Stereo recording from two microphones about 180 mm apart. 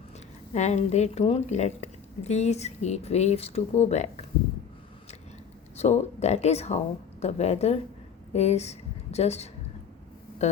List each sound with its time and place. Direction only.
0.5 s a woman's voice: 40° left (ahead or behind)
5.7 s a woman's voice: 35° left (ahead or behind)